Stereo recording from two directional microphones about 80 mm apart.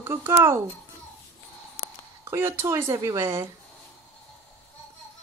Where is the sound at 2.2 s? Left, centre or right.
Right.